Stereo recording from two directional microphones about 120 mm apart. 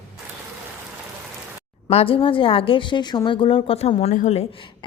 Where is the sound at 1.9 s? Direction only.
55° left (ahead or behind); by 4.4 s 75° left (ahead or behind).